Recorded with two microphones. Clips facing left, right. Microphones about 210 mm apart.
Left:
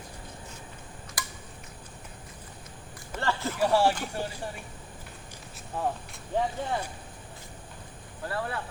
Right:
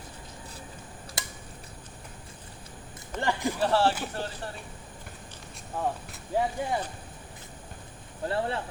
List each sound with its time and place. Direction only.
1.2 s tick-tock: 25° right (ahead or behind)
3.2 s speech: 15° right (ahead or behind)
3.6 s speech: 10° left (ahead or behind)
5.7 s speech: centre (ahead or behind)
6.3 s speech: 10° right (ahead or behind)
8.2 s speech: 25° right (ahead or behind)